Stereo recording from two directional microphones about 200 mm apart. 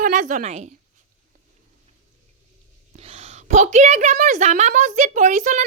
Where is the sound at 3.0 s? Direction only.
35° right (ahead or behind).